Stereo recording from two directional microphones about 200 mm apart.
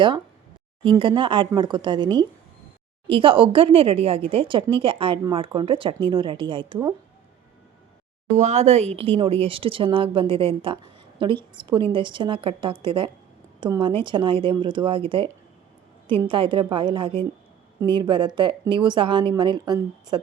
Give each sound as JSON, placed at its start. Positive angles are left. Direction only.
{"t": 0.9, "sound": "speech", "side_deg": -25}
{"t": 8.4, "sound": "speech", "side_deg": -35}